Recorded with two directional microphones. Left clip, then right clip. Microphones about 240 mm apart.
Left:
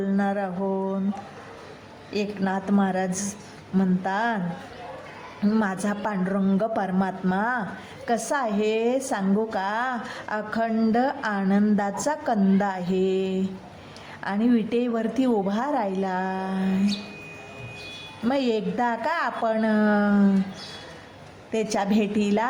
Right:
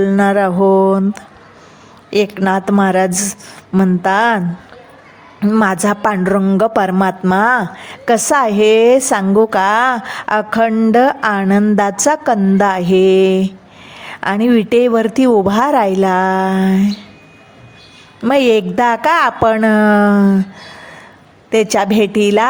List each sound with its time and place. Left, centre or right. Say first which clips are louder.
0.0 s a woman's voice: right 14 dB; right
5.4 s a woman's voice: right 12 dB; right
18.2 s a woman's voice: right 13 dB; right
21.5 s a woman's voice: right 12 dB; right